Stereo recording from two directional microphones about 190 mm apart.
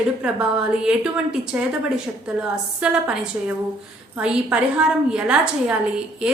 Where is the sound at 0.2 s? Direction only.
5° right (ahead or behind).